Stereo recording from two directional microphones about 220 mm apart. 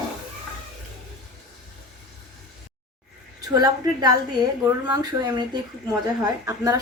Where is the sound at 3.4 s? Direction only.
15° right (ahead or behind).